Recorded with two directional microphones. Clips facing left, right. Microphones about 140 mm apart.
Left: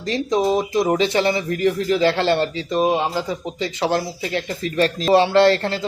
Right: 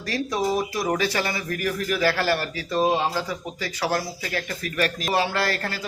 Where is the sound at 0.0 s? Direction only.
20° left (ahead or behind).